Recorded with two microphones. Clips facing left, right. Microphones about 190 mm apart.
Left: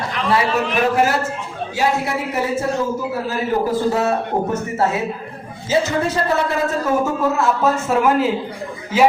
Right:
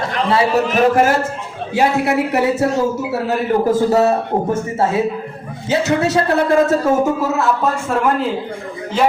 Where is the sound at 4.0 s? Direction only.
30° right (ahead or behind).